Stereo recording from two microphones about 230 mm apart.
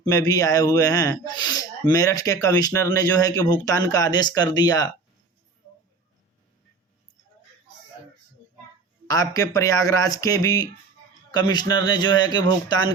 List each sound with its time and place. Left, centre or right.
0.0 s speech: centre
9.0 s a man's voice: centre